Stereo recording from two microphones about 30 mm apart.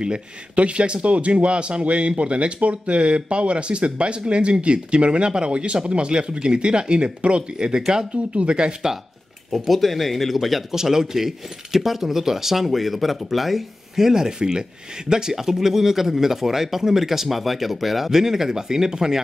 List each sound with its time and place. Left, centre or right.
0.6 s speech: right
7.5 s speech: right
8.1 s speech: right
9.5 s speech: centre
10.7 s speech: centre
13.9 s speech: centre